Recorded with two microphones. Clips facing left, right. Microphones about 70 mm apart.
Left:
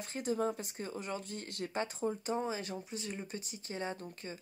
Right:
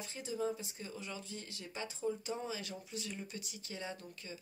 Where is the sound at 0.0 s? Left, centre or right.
Left.